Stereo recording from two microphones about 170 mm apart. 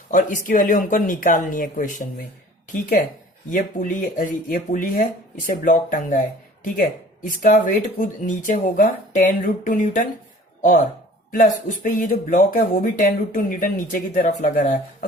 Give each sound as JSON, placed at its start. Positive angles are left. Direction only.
{"t": 0.1, "sound": "speech", "side_deg": 50}
{"t": 3.5, "sound": "speech", "side_deg": 50}
{"t": 7.3, "sound": "speech", "side_deg": 50}
{"t": 11.3, "sound": "speech", "side_deg": 50}